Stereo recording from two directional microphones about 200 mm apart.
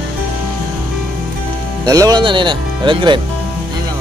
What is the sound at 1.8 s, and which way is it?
Speech, 20° right (ahead or behind).